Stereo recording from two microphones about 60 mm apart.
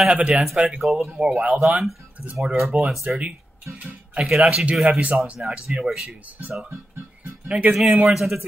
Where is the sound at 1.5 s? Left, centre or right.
Centre.